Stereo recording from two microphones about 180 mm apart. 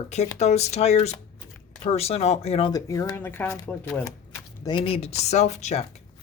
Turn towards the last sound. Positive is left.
turn(degrees=40)  # may be behind; listen again after turning